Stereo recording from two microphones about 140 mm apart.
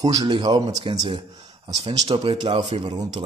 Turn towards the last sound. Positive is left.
turn(degrees=-30)  # may be behind; listen again after turning